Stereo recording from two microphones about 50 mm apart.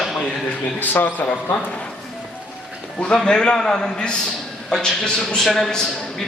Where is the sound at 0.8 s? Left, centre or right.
Left.